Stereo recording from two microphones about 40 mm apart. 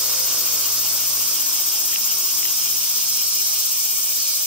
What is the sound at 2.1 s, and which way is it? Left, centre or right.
Insect, centre.